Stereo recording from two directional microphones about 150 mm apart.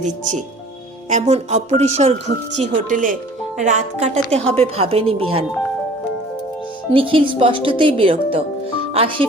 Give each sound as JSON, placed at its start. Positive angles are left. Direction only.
{"t": 1.1, "sound": "speech", "side_deg": -50}
{"t": 6.9, "sound": "speech", "side_deg": -35}